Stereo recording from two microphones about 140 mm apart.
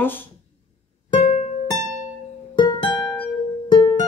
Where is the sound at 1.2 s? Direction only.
55° left (ahead or behind).